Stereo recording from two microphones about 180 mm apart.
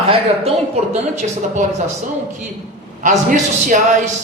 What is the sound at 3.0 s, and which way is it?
Speech, 45° right (ahead or behind).